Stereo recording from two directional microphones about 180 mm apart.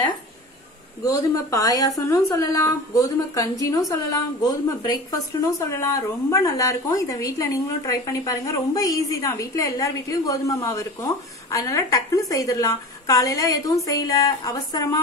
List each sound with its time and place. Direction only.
1.0 s a woman's voice: 20° left (ahead or behind)